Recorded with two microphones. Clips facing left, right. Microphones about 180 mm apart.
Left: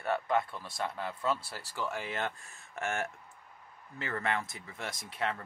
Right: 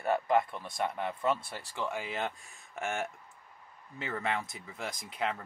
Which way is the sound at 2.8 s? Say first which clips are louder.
Even; centre (ahead or behind).